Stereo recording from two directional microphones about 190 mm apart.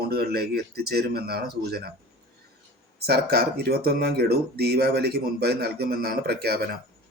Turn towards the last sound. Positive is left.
turn(degrees=-55)  # may be behind; listen again after turning